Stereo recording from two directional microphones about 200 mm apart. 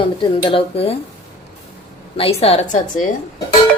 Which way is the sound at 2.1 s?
30° left (ahead or behind).